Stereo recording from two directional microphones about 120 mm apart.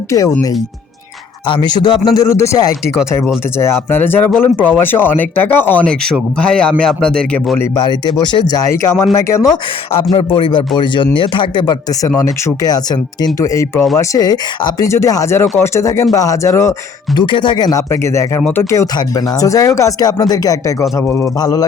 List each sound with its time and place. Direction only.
0.1 s speech: 30° left (ahead or behind)
1.5 s speech: 40° left (ahead or behind)
2.2 s speech: 25° left (ahead or behind); by 7.6 s 5° left (ahead or behind)
7.8 s speech: 35° left (ahead or behind)
10.2 s a man's voice: 45° left (ahead or behind); by 16.7 s 25° left (ahead or behind)
17.2 s speech: 40° left (ahead or behind)